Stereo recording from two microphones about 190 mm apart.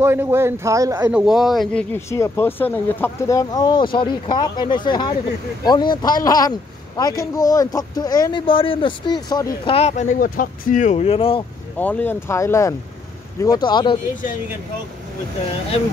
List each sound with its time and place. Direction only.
0.0 s speech: 10° right (ahead or behind)
1.2 s speech: centre (ahead or behind); by 11.4 s 30° left (ahead or behind)
11.8 s speech: 10° left (ahead or behind)